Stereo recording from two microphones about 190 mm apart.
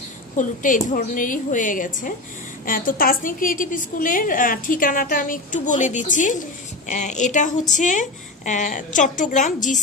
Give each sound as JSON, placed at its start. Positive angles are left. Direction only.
{"t": 0.4, "sound": "a woman's voice", "side_deg": 40}